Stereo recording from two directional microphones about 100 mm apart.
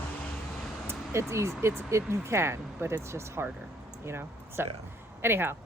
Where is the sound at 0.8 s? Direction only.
25° right (ahead or behind).